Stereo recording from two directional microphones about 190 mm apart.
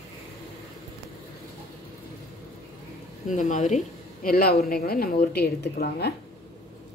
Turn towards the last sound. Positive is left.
turn(degrees=60)  # may be behind; listen again after turning